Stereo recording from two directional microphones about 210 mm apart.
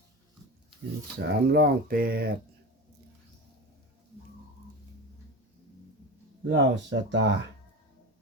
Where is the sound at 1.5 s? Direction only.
45° right (ahead or behind).